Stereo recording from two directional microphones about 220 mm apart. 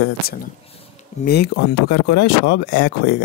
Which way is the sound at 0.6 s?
30° left (ahead or behind).